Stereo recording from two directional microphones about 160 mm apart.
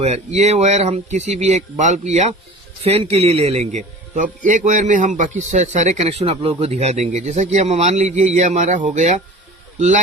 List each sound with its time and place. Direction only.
0.0 s a man's voice: 40° right (ahead or behind)